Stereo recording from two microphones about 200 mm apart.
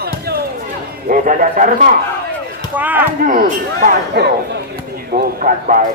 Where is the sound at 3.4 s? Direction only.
50° right (ahead or behind).